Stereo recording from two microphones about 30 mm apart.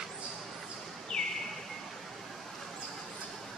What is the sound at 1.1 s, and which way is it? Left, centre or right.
Bird, left.